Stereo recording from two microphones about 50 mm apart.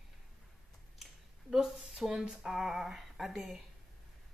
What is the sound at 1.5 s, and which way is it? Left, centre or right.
Speech, centre.